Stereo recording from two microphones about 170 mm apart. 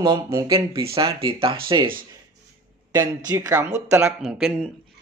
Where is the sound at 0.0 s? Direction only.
25° right (ahead or behind).